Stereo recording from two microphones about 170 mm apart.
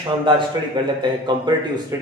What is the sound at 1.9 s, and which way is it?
Speech, 15° right (ahead or behind).